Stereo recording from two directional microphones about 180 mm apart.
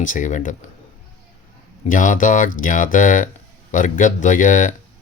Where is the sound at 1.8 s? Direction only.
45° left (ahead or behind).